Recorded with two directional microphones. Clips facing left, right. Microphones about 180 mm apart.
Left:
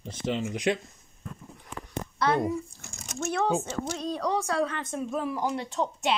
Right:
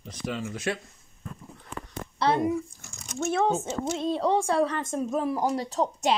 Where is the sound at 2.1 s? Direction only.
30° right (ahead or behind).